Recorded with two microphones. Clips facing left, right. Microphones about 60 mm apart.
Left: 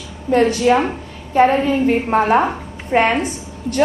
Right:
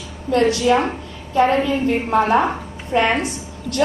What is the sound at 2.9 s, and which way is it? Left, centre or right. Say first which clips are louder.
Speech: left 3 dB; left.